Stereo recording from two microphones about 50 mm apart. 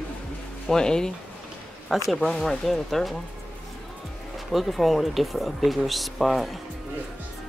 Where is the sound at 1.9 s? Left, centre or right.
Centre.